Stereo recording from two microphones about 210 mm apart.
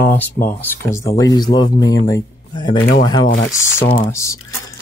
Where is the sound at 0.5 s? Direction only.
10° left (ahead or behind).